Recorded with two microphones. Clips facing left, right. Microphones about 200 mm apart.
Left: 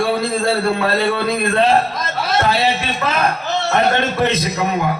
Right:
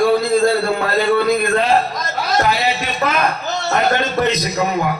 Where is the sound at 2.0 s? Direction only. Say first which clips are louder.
Even; 30° left (ahead or behind).